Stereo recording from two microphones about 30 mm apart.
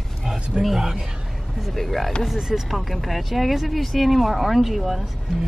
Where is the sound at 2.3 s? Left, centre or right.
Centre.